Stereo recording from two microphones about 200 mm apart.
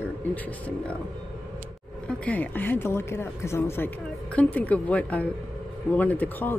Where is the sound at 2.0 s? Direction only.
10° left (ahead or behind).